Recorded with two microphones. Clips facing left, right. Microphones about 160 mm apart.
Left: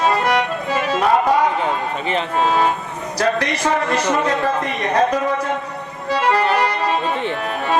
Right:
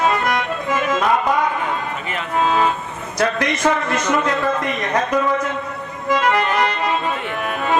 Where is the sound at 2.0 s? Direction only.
30° left (ahead or behind).